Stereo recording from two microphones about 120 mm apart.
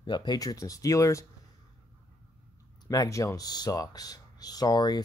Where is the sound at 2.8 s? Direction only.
30° left (ahead or behind).